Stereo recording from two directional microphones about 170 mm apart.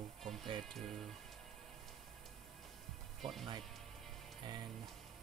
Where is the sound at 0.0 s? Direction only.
Centre (ahead or behind).